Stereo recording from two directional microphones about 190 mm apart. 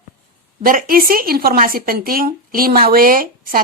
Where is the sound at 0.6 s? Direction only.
50° right (ahead or behind).